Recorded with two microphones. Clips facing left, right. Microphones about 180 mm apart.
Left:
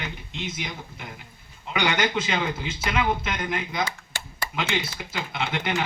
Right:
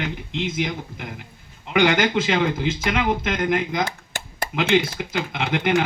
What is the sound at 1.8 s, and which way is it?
Speech, 55° right (ahead or behind).